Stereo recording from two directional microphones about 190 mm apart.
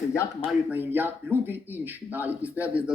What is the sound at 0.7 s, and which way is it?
Speech, 10° right (ahead or behind).